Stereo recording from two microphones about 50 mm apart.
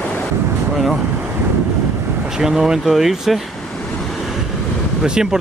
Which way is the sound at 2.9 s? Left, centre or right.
Centre.